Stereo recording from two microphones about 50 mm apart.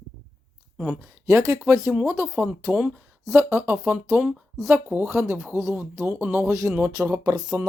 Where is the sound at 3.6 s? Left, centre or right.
Right.